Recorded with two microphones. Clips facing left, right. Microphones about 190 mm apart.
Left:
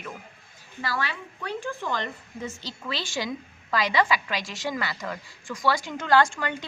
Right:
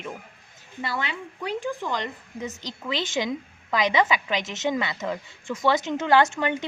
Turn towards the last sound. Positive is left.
turn(degrees=-20)  # may be behind; listen again after turning